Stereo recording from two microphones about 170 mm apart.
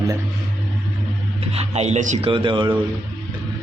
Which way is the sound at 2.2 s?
30° right (ahead or behind).